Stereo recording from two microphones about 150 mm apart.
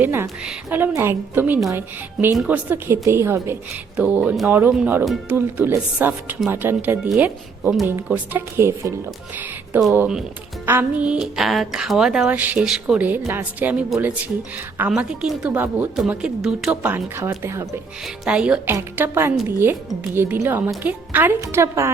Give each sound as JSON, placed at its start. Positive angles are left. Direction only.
{"t": 0.0, "sound": "a woman's voice", "side_deg": -15}
{"t": 9.9, "sound": "a woman's voice", "side_deg": -15}
{"t": 16.8, "sound": "a woman's voice", "side_deg": -15}
{"t": 18.0, "sound": "a woman's voice", "side_deg": -5}